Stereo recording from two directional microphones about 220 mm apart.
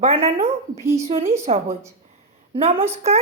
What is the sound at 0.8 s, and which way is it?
Speech, 15° right (ahead or behind).